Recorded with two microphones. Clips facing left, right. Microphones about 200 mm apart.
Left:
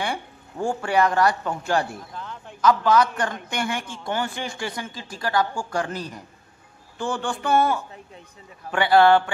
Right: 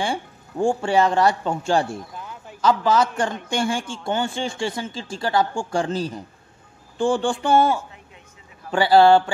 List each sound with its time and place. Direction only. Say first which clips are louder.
0.0 s a man's voice: right 3 dB; 30° right (ahead or behind)
2.1 s a sound: even; 10° right (ahead or behind)
2.6 s a man's voice: even; 30° right (ahead or behind)